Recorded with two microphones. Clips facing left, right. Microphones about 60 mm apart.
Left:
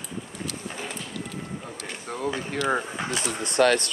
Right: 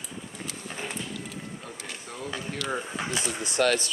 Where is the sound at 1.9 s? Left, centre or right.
Left.